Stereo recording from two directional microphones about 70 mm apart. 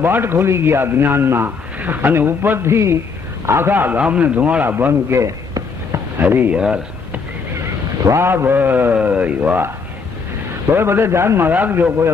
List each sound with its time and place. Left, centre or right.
0.0 s a man's voice: right
4.6 s a man's voice: right
5.2 s a sound: right
6.1 s speech: right
6.5 s speech: centre
7.6 s a man's voice: right
10.7 s a man's voice: right